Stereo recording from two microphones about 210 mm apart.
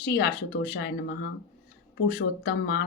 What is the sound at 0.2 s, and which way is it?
Speech, 50° left (ahead or behind).